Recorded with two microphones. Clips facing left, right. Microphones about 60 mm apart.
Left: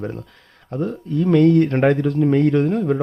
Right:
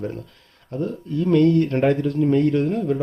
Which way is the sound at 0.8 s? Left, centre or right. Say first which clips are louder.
Left 3 dB; left.